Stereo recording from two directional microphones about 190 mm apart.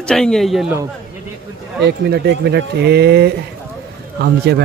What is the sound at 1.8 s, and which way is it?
Speech, 60° right (ahead or behind).